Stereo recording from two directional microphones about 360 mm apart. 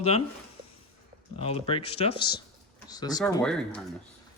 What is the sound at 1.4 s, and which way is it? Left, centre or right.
Speech, centre.